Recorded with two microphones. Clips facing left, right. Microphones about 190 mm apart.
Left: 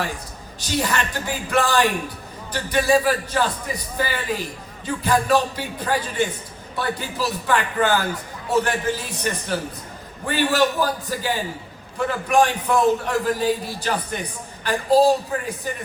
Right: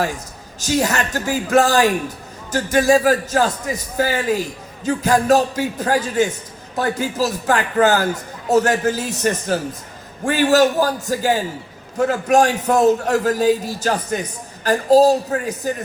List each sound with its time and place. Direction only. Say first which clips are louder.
0.6 s a man's voice: right 5 dB; 45° right (ahead or behind)